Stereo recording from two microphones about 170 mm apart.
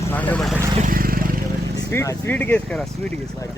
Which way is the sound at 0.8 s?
55° right (ahead or behind).